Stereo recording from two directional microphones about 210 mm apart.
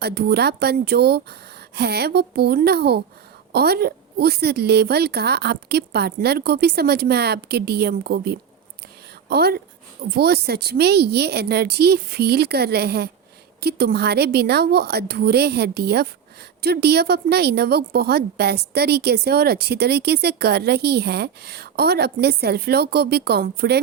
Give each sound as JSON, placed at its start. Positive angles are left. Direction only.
{"t": 0.0, "sound": "a woman's voice", "side_deg": -50}